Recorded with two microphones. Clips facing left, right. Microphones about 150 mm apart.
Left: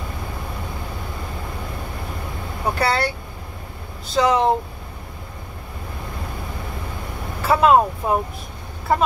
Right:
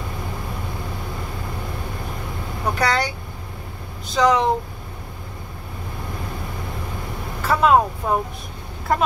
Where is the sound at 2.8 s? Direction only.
5° left (ahead or behind).